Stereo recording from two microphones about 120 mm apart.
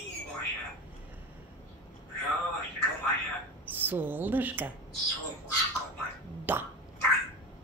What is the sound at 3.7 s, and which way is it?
A woman's voice, 15° right (ahead or behind).